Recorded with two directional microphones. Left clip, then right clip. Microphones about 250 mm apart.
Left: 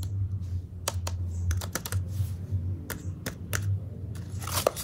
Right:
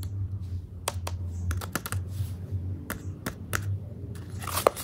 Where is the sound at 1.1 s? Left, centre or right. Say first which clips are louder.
Right 1 dB; centre.